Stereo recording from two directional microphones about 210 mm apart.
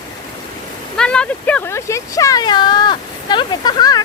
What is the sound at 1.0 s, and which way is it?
Speech, 5° left (ahead or behind).